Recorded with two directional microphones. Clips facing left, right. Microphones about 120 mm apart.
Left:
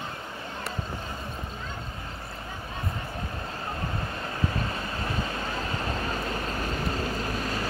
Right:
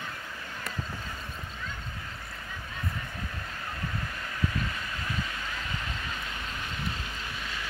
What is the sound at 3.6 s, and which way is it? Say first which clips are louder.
Vehicle: left 3 dB; 35° left (ahead or behind).